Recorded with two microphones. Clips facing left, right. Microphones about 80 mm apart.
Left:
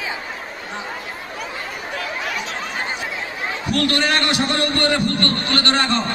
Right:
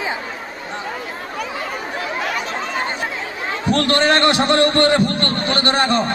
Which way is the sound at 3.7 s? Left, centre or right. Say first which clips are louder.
Right 4 dB; right.